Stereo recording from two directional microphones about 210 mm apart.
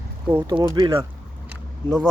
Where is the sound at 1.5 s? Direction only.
Centre (ahead or behind).